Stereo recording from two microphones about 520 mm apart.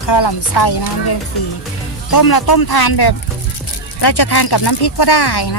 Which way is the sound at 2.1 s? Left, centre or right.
Left.